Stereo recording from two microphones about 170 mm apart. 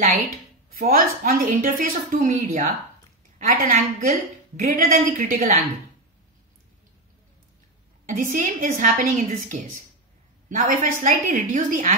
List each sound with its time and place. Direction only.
0.7 s a woman's voice: 60° right (ahead or behind)
8.1 s a woman's voice: 50° right (ahead or behind)